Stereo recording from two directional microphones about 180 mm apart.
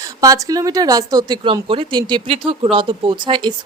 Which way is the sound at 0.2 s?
20° right (ahead or behind).